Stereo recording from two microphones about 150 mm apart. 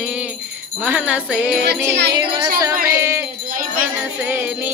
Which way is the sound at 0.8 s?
10° right (ahead or behind).